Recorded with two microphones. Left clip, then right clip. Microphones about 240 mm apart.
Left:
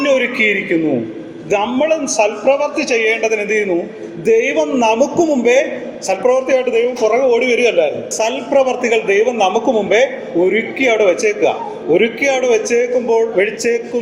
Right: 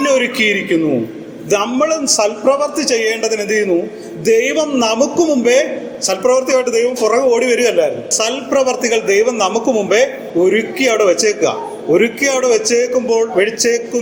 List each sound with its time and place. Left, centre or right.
0.0 s a man's voice: centre